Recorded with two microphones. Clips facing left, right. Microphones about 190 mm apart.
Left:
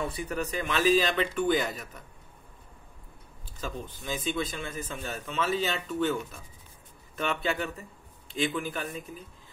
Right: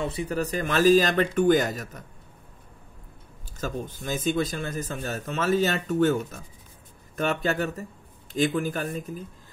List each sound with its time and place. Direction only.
0.0 s speech: 25° right (ahead or behind); by 2.0 s 40° right (ahead or behind)
3.5 s speech: 45° right (ahead or behind)